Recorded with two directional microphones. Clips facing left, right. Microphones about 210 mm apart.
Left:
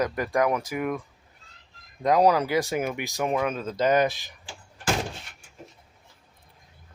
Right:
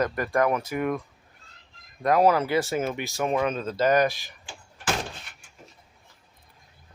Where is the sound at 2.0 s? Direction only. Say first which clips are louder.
Even; 15° left (ahead or behind).